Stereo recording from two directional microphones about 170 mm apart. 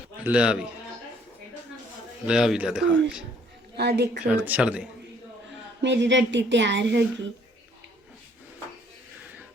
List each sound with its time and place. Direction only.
0.2 s speech: 5° right (ahead or behind)
2.2 s speech: 5° right (ahead or behind)
3.8 s a woman's voice: 75° right (ahead or behind)
4.3 s speech: 10° right (ahead or behind)
5.8 s speech: 90° right